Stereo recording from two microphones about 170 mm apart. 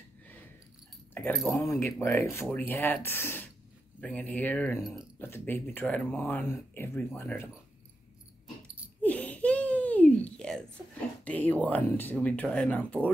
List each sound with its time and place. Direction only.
1.1 s speech: 10° left (ahead or behind)
9.0 s a sound: 10° left (ahead or behind)
11.2 s speech: 10° left (ahead or behind)